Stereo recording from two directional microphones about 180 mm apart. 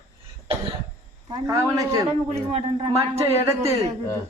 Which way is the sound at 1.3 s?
20° right (ahead or behind).